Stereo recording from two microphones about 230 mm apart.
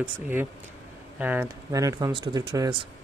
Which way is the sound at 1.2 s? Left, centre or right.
Centre.